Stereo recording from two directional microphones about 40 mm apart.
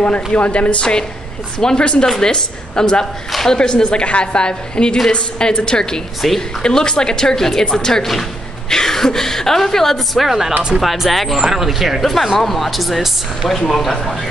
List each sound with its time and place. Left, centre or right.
0.0 s a woman's voice: left; by 8.1 s centre
8.1 s a sound: centre
8.7 s a woman's voice: centre
10.2 s speech: centre
11.4 s speech: centre
12.0 s speech: centre
13.6 s a woman's voice: centre